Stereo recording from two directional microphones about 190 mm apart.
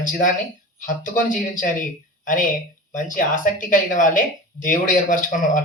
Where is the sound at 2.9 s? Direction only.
45° left (ahead or behind).